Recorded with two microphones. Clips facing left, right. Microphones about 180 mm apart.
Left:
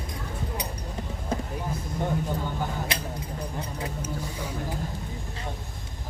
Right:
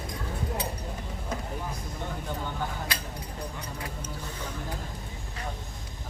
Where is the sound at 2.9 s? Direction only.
20° left (ahead or behind).